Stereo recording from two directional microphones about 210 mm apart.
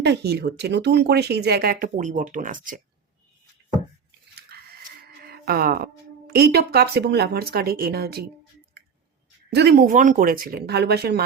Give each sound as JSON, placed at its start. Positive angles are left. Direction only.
{"t": 0.0, "sound": "speech", "side_deg": -55}
{"t": 4.5, "sound": "livestock", "side_deg": -50}
{"t": 5.2, "sound": "speech", "side_deg": -50}
{"t": 9.5, "sound": "speech", "side_deg": -50}